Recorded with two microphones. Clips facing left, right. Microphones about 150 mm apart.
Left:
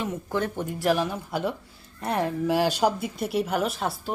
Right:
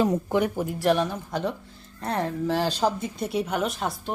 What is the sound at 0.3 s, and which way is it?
Speech, 15° right (ahead or behind).